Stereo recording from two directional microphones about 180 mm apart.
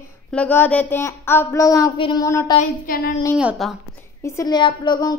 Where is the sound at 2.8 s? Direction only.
55° left (ahead or behind).